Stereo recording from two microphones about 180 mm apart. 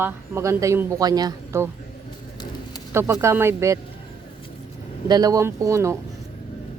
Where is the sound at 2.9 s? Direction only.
15° right (ahead or behind).